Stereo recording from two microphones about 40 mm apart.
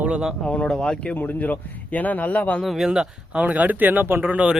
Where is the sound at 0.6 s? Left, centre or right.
Centre.